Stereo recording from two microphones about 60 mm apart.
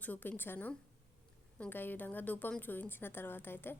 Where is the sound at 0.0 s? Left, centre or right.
Left.